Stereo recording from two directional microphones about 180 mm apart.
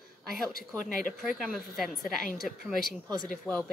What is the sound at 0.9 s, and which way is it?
Speech, 50° left (ahead or behind).